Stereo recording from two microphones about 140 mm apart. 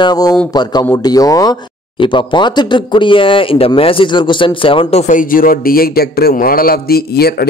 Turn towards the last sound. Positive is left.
turn(degrees=90)